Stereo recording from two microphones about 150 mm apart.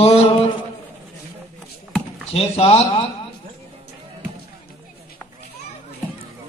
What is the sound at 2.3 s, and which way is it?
Speech, 40° left (ahead or behind).